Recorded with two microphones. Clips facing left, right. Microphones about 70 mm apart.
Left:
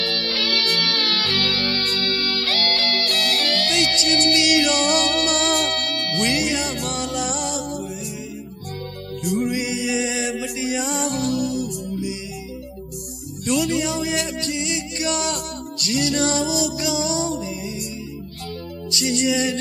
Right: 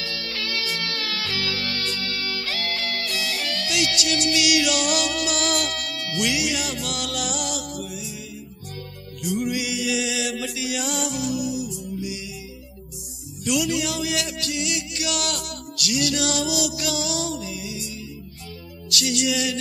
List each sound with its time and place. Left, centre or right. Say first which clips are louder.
0.0 s music: left 6 dB; left
1.2 s music: left 4 dB; centre
1.5 s music: left 4 dB; left
2.3 s music: left 5 dB; centre
2.6 s music: left 5 dB; left
3.0 s music: left 5 dB; centre
3.7 s music: left 1 dB; left
5.5 s music: left 4 dB; centre
6.2 s music: left 2 dB; left
9.4 s music: left 1 dB; left
11.2 s music: left 3 dB; centre
13.7 s music: left 3 dB; left
18.9 s music: left 3 dB; left